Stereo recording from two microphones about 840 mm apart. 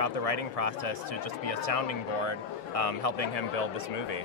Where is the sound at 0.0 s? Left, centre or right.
Left.